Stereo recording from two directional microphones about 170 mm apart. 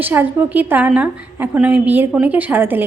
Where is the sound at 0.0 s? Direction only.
10° right (ahead or behind).